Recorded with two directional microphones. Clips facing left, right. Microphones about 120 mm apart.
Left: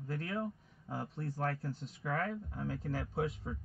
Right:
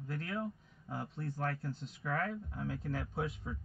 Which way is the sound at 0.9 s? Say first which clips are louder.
Left 1 dB; 40° left (ahead or behind).